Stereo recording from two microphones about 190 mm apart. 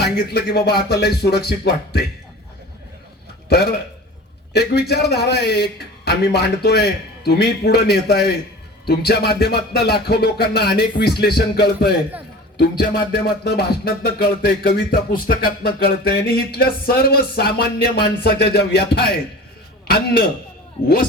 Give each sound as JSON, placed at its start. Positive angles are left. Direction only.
{"t": 0.0, "sound": "music", "side_deg": 55}
{"t": 3.5, "sound": "music", "side_deg": 55}
{"t": 19.9, "sound": "speech", "side_deg": 55}